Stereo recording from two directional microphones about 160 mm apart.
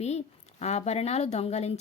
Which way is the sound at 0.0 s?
45° left (ahead or behind).